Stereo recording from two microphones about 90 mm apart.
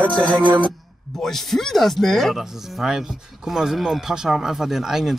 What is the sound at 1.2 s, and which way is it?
Speech, 5° left (ahead or behind).